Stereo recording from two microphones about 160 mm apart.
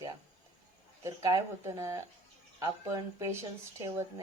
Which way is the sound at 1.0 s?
20° right (ahead or behind).